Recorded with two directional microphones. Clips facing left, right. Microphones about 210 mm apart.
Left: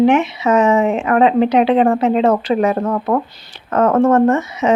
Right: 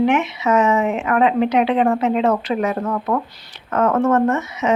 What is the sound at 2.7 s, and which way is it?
Speech, 45° left (ahead or behind).